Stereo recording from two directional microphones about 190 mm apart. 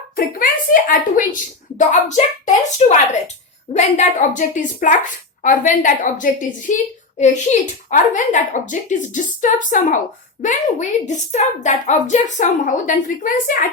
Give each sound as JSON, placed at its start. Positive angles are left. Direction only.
{"t": 0.2, "sound": "a woman's voice", "side_deg": 45}